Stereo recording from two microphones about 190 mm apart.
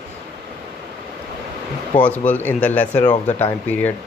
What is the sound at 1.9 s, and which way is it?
Speech, 10° left (ahead or behind).